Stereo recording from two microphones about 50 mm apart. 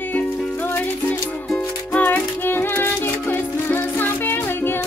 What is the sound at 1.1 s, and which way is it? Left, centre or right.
Music, left.